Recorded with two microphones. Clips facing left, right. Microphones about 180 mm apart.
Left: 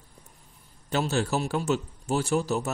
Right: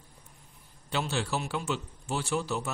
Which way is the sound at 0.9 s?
45° left (ahead or behind).